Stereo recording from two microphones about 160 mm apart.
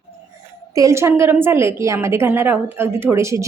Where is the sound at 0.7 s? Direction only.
20° right (ahead or behind).